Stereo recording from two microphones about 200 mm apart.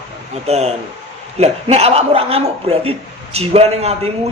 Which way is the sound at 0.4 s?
30° right (ahead or behind).